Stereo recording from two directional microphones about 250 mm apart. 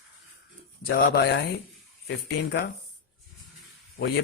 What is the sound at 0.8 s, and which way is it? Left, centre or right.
Speech, left.